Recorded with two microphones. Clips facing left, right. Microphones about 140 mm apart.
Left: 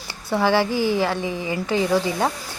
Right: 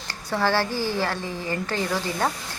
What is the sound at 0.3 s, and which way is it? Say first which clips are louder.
Speech: left 4 dB; 15° left (ahead or behind).